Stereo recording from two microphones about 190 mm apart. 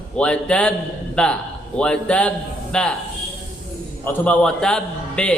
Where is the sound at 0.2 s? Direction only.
5° left (ahead or behind).